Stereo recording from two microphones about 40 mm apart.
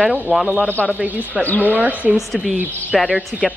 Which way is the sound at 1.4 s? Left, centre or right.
Left.